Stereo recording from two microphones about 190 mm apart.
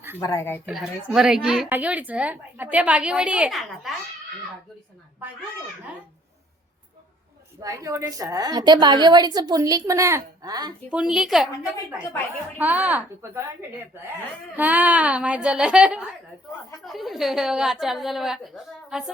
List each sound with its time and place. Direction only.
0.2 s a woman's voice: 15° left (ahead or behind)
0.6 s a woman's voice: centre (ahead or behind)
7.6 s a woman's voice: 15° right (ahead or behind)
10.9 s a woman's voice: 5° right (ahead or behind)
12.5 s a woman's voice: 5° right (ahead or behind)